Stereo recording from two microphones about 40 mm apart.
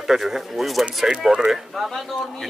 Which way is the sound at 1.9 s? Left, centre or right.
Centre.